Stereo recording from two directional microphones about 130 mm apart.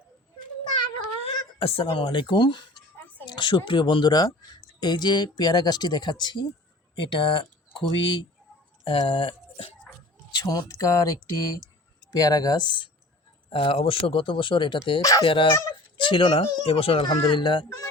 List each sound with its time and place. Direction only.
1.2 s speech: 45° left (ahead or behind)
3.2 s a sound: 35° left (ahead or behind)
3.7 s speech: 40° left (ahead or behind)
10.3 s speech: 30° left (ahead or behind)